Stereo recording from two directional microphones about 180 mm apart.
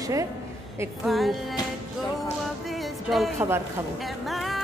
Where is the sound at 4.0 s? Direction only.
Centre (ahead or behind).